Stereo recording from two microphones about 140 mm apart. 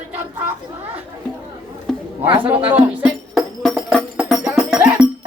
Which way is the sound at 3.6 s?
Centre (ahead or behind).